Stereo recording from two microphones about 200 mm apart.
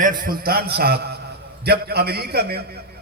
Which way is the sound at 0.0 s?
40° right (ahead or behind).